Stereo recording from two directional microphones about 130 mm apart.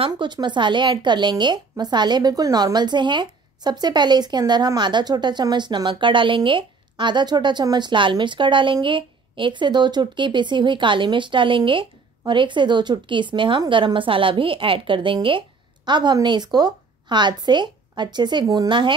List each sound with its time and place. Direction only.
0.0 s a woman's voice: 35° right (ahead or behind)